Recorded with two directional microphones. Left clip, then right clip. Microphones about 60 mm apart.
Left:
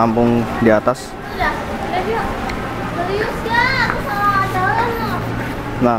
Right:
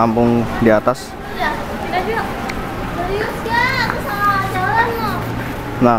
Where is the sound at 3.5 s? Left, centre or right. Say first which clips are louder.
Left 1 dB; right.